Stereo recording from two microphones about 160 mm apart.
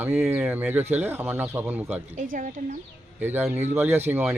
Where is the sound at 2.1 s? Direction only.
55° right (ahead or behind).